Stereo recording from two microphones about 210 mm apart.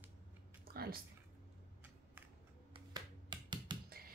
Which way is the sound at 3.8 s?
45° right (ahead or behind).